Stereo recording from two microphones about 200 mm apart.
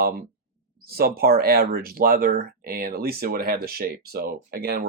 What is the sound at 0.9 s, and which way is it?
Speech, 50° right (ahead or behind).